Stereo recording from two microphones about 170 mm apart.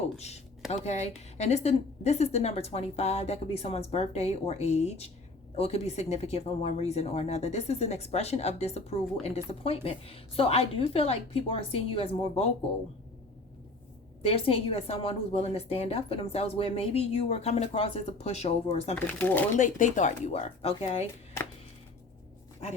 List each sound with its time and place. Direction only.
0.0 s a sound: 40° left (ahead or behind)
0.9 s speech: 40° left (ahead or behind)
14.2 s speech: 35° left (ahead or behind)
18.9 s speech: 10° left (ahead or behind)
19.5 s speech: 45° left (ahead or behind)